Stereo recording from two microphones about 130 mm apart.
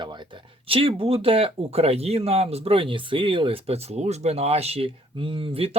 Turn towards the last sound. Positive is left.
turn(degrees=-45)  # may be behind; listen again after turning